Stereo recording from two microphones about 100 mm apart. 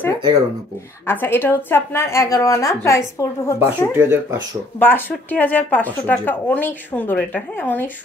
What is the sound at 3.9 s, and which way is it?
Speech, 20° right (ahead or behind).